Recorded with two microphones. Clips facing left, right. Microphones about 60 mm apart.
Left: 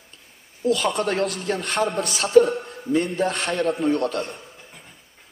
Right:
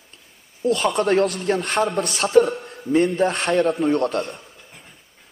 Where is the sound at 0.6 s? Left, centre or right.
Right.